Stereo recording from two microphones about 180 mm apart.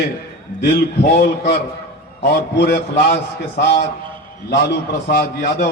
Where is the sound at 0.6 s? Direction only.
65° left (ahead or behind).